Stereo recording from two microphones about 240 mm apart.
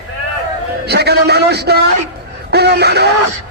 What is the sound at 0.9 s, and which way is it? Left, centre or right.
Speech, right.